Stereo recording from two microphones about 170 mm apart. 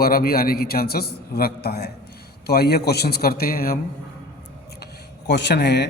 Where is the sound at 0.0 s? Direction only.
60° left (ahead or behind).